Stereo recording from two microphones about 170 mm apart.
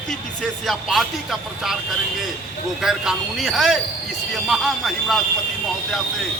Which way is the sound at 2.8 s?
5° right (ahead or behind).